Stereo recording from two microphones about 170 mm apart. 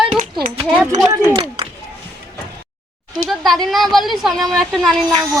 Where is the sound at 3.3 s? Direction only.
Centre (ahead or behind).